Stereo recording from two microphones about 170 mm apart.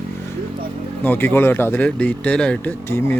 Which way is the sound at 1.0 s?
10° left (ahead or behind).